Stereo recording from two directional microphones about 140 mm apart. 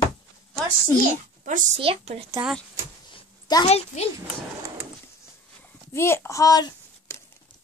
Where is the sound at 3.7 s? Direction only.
50° left (ahead or behind).